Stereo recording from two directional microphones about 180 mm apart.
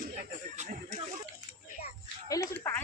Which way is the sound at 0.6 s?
40° right (ahead or behind).